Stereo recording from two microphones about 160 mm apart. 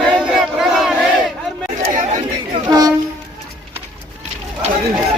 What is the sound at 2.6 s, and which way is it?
Train, 25° right (ahead or behind).